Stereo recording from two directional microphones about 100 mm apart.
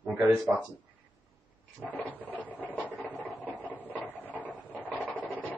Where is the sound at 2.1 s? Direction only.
15° left (ahead or behind).